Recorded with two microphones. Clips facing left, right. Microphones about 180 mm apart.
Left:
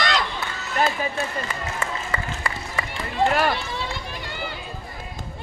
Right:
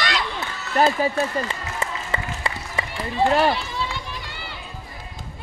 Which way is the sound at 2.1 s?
25° right (ahead or behind).